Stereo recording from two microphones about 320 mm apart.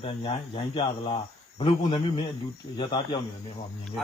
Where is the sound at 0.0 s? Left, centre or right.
Centre.